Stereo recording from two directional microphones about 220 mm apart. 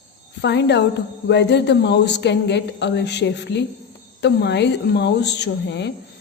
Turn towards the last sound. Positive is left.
turn(degrees=50)  # may be behind; listen again after turning